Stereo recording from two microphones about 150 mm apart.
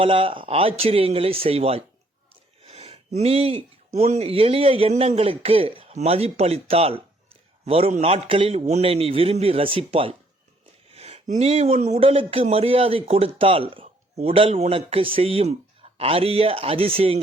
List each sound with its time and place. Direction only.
0.0 s speech: 35° right (ahead or behind)